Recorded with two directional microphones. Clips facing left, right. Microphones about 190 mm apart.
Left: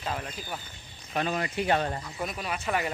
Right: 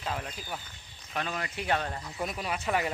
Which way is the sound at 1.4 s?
5° left (ahead or behind).